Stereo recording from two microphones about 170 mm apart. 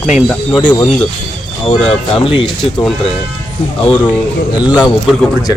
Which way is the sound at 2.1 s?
30° left (ahead or behind).